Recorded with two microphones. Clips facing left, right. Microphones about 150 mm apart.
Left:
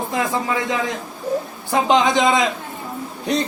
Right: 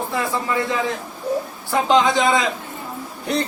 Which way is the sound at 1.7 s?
20° left (ahead or behind).